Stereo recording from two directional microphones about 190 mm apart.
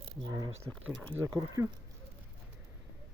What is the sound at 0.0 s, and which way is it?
Speech, 25° right (ahead or behind).